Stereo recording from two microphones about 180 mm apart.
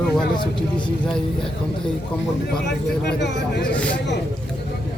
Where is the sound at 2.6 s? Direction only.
70° left (ahead or behind).